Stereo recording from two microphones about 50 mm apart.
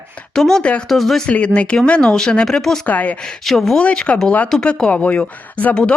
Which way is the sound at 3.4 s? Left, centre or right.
Centre.